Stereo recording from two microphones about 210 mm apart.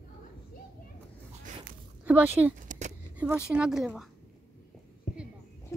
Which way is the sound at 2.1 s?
5° right (ahead or behind).